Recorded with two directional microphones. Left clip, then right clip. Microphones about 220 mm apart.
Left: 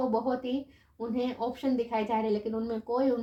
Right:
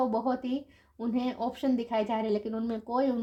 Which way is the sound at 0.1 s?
40° right (ahead or behind).